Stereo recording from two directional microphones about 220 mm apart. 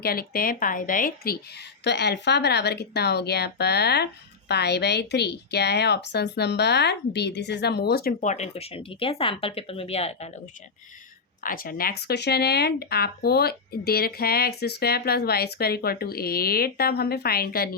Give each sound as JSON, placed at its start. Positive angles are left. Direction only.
{"t": 0.0, "sound": "a woman's voice", "side_deg": 45}
{"t": 11.4, "sound": "a woman's voice", "side_deg": 40}